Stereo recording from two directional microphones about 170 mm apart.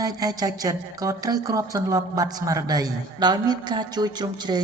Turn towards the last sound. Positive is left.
turn(degrees=-25)  # may be behind; listen again after turning